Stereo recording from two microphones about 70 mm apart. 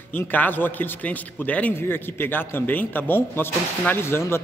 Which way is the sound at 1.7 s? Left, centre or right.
Left.